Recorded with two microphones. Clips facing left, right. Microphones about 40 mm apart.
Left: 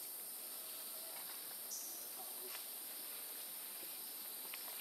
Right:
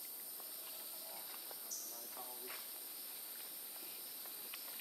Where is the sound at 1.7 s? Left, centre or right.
Centre.